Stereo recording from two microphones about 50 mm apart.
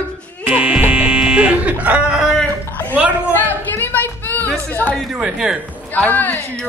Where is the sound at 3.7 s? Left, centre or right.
Left.